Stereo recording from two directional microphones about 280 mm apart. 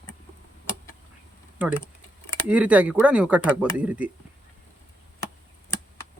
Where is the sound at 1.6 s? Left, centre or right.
Centre.